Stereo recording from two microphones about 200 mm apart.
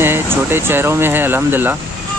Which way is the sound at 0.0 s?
10° right (ahead or behind).